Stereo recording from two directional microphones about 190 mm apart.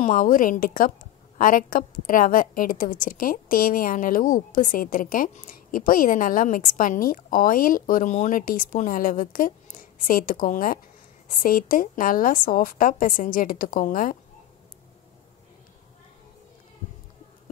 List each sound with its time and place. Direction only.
0.0 s a woman's voice: 45° left (ahead or behind)